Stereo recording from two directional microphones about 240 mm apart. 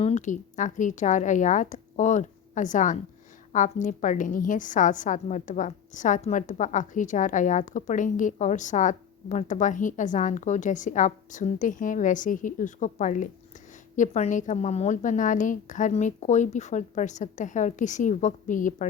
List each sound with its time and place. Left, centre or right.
0.0 s a woman's voice: left